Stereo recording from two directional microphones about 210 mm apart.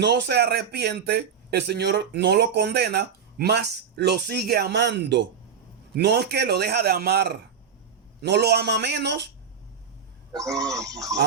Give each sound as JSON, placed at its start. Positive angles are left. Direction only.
{"t": 0.0, "sound": "speech", "side_deg": -55}
{"t": 10.5, "sound": "speech", "side_deg": -15}